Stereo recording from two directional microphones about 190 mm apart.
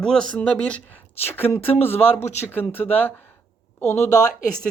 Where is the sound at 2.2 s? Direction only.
35° left (ahead or behind).